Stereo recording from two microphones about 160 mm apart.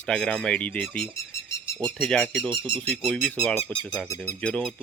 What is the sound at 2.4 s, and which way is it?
Speech, 30° right (ahead or behind).